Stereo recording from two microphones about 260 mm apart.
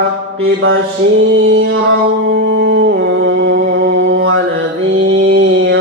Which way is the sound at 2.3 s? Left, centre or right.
Right.